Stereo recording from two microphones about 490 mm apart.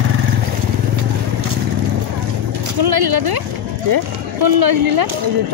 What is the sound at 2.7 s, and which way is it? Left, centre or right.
Speech, right.